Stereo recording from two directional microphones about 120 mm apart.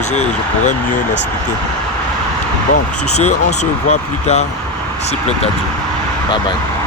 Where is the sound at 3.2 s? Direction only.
70° left (ahead or behind).